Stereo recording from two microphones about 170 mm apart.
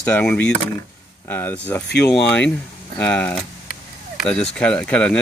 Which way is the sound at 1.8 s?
75° left (ahead or behind).